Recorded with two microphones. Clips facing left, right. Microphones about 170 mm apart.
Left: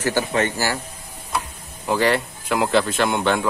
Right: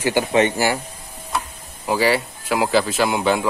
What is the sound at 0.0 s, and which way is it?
Speech, 15° right (ahead or behind).